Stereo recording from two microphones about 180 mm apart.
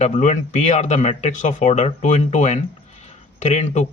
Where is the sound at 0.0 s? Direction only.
40° left (ahead or behind).